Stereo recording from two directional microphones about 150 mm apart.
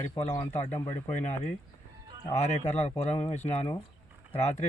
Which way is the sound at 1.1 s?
50° left (ahead or behind).